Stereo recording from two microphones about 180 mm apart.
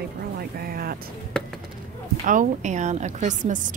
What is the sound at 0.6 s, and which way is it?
Speech, 55° right (ahead or behind).